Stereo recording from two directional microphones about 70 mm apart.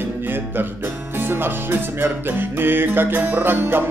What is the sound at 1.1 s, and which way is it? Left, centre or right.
Music, right.